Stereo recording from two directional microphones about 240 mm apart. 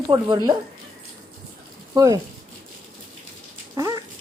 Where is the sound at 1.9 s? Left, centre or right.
Centre.